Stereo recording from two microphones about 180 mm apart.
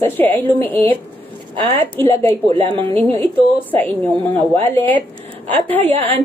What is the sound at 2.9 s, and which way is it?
Speech, 10° left (ahead or behind).